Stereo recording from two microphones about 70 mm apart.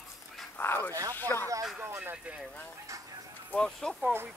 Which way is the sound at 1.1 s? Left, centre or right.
Left.